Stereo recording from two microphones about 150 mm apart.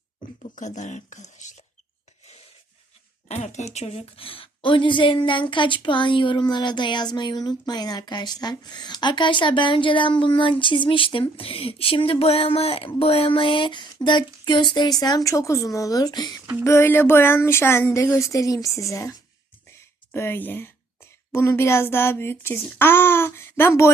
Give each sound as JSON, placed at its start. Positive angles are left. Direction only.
{"t": 0.5, "sound": "speech", "side_deg": 55}
{"t": 3.2, "sound": "a woman's voice", "side_deg": 45}
{"t": 16.6, "sound": "a sound", "side_deg": 15}
{"t": 20.1, "sound": "speech", "side_deg": 15}